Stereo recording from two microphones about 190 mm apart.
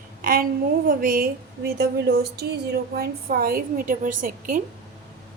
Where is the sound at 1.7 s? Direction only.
60° right (ahead or behind).